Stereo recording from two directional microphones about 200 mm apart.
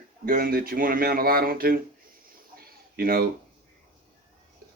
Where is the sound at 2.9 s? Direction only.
50° right (ahead or behind).